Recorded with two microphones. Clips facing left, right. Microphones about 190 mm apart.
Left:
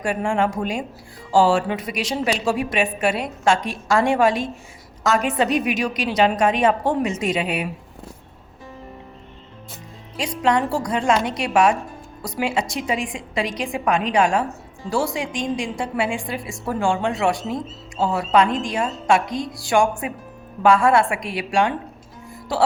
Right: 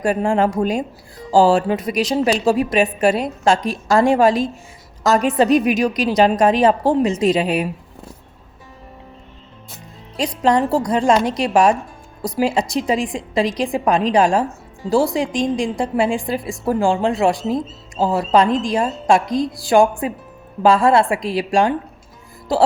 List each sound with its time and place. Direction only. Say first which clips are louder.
0.0 s a woman's voice: right 4 dB; 40° right (ahead or behind)
10.2 s a woman's voice: right 4 dB; 35° right (ahead or behind)